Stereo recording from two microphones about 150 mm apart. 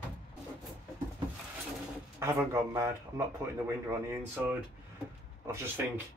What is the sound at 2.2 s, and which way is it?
Speech, 15° right (ahead or behind).